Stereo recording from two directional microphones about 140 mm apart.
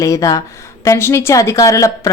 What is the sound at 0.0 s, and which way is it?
A woman's voice, 25° left (ahead or behind).